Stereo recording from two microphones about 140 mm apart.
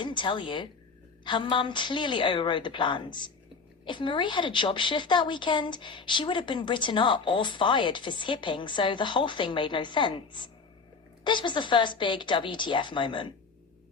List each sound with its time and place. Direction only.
0.0 s a woman's voice: 35° left (ahead or behind)